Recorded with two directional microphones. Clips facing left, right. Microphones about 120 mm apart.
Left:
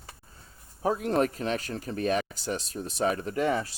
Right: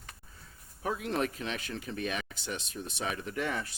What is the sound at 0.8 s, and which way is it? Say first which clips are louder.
Speech: left 6 dB; 40° left (ahead or behind).